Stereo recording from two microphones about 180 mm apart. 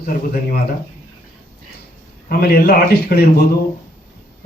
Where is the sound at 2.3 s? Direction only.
60° left (ahead or behind).